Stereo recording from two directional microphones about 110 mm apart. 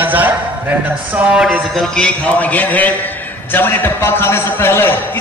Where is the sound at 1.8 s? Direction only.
10° left (ahead or behind).